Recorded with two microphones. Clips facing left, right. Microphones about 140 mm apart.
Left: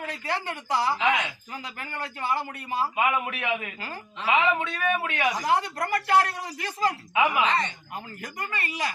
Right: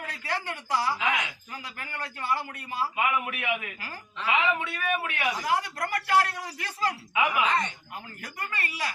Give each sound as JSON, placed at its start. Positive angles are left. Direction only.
{"t": 0.1, "sound": "a man's voice", "side_deg": 20}
{"t": 7.4, "sound": "speech", "side_deg": -5}
{"t": 8.2, "sound": "a man's voice", "side_deg": 20}